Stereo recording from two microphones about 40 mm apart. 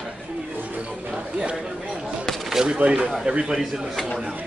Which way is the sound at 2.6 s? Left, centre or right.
Right.